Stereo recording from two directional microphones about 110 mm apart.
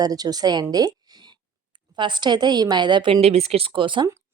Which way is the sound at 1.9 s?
45° right (ahead or behind).